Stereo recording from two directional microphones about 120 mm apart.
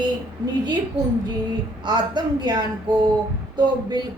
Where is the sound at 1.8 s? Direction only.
35° right (ahead or behind).